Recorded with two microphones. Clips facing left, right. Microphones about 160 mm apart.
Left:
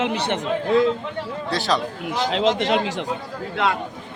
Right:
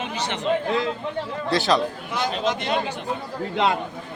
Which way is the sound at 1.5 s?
Centre (ahead or behind).